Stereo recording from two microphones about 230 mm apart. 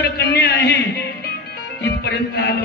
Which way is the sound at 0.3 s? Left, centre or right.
Left.